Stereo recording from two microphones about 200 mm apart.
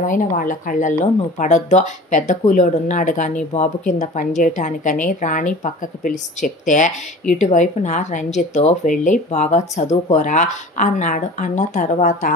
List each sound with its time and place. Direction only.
0.0 s speech: 40° left (ahead or behind)